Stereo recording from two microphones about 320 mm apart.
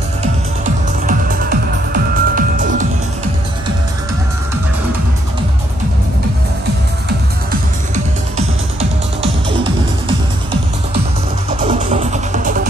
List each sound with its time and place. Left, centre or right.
0.2 s music: right
11.6 s music: right